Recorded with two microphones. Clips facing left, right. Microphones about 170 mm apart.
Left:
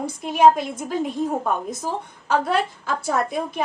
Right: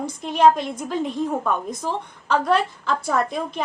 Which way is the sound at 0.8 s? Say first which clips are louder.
Even; 50° left (ahead or behind).